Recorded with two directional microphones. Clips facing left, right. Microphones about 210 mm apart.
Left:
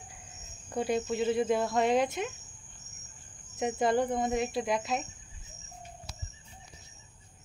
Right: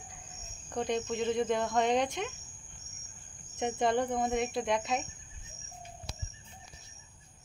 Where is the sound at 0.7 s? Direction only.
5° left (ahead or behind).